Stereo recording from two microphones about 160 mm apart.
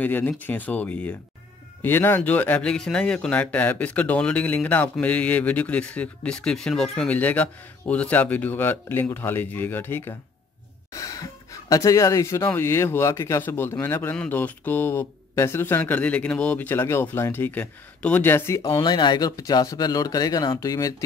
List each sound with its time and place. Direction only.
0.0 s speech: 10° left (ahead or behind)